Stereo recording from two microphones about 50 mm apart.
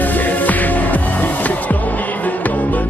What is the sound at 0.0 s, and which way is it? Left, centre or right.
Music, left.